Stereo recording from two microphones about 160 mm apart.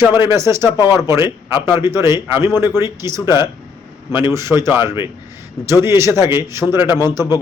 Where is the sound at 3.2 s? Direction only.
25° left (ahead or behind).